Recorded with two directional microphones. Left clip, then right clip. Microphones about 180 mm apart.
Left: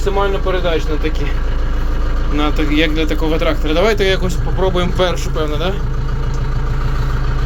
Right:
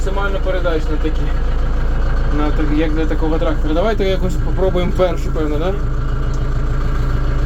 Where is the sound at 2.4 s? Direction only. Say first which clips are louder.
Left 3 dB; 5° left (ahead or behind).